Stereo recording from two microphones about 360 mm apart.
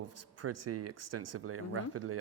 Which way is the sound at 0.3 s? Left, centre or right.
Right.